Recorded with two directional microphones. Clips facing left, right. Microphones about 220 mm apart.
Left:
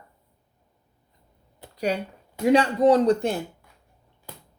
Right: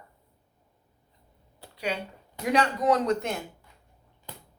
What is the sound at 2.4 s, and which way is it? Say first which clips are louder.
Speech: left 6 dB; 30° left (ahead or behind).